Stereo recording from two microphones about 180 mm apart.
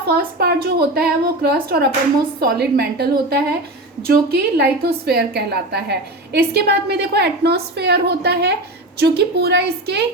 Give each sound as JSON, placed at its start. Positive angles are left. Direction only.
{"t": 0.0, "sound": "a woman's voice", "side_deg": -60}